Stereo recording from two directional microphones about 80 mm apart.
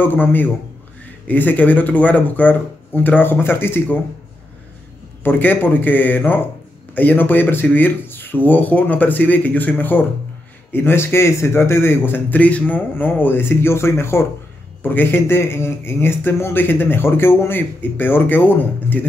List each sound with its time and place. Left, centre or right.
0.0 s a man's voice: left
5.2 s a man's voice: left